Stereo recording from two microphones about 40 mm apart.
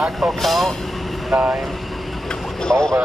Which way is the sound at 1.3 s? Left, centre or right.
Right.